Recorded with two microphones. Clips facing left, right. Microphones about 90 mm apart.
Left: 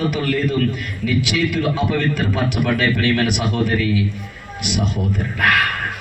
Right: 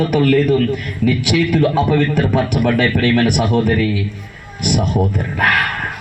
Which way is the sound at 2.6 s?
40° right (ahead or behind).